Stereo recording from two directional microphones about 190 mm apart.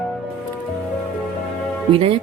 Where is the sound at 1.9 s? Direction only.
30° right (ahead or behind).